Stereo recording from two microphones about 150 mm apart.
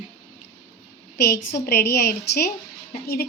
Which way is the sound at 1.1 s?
90° left.